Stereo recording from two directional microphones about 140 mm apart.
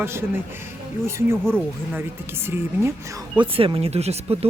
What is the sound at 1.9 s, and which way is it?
Speech, 15° right (ahead or behind).